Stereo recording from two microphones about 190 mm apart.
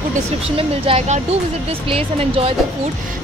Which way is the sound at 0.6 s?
30° right (ahead or behind).